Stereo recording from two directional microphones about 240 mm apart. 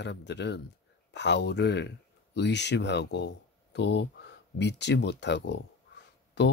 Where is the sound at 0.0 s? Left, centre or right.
Left.